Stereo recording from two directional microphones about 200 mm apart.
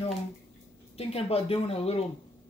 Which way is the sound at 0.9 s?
30° left (ahead or behind).